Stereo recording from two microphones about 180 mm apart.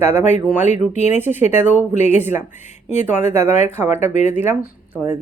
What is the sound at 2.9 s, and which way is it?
Speech, 40° left (ahead or behind).